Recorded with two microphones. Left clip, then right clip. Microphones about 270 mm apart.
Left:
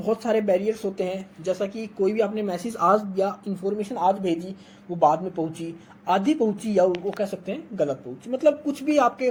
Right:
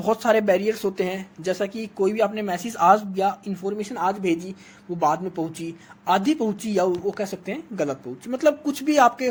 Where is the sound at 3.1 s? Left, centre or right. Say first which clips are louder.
Right 2 dB; right.